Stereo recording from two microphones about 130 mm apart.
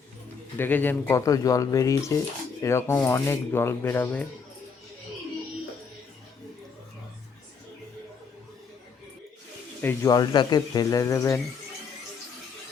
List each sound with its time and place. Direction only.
0.6 s speech: 15° left (ahead or behind)
9.8 s speech: 25° left (ahead or behind)